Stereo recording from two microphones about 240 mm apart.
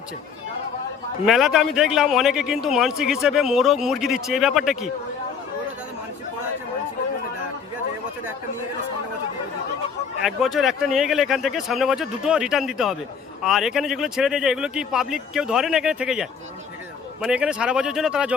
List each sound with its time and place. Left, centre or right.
1.2 s a man's voice: centre
10.2 s a man's voice: centre